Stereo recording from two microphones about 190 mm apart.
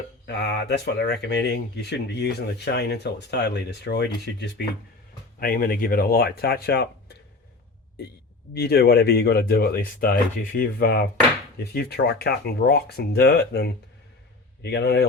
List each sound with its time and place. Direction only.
0.3 s speech: 60° left (ahead or behind)
5.4 s speech: 50° left (ahead or behind)
8.5 s speech: 55° left (ahead or behind)